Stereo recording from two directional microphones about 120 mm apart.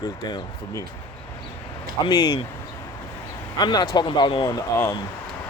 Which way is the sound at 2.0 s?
40° left (ahead or behind).